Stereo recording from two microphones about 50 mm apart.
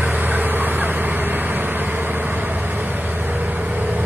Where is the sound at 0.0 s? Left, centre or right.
Right.